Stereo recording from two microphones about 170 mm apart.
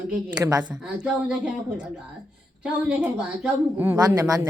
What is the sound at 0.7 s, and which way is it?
A woman's voice, 5° right (ahead or behind).